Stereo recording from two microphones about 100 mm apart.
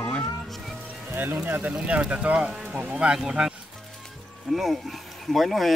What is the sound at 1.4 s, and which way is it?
Speech, 20° right (ahead or behind).